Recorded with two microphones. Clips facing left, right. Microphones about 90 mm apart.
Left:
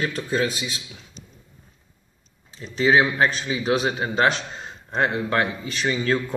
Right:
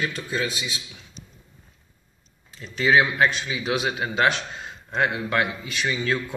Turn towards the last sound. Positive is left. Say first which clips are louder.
# left 3 dB
turn(degrees=35)  # may be behind; listen again after turning